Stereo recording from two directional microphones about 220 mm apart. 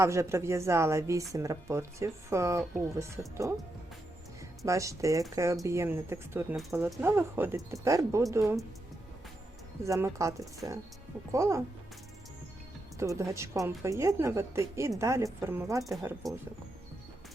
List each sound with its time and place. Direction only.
0.0 s a woman's voice: 15° right (ahead or behind)
9.8 s a woman's voice: 15° right (ahead or behind)
13.0 s a woman's voice: 15° right (ahead or behind)